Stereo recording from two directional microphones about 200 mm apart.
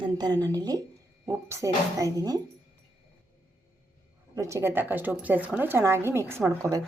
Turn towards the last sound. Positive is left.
turn(degrees=-15)  # may be behind; listen again after turning